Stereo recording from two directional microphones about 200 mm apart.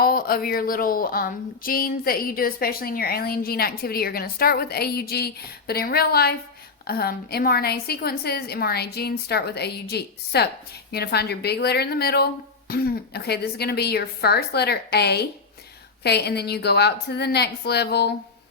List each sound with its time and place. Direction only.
0.0 s a woman's voice: 45° left (ahead or behind)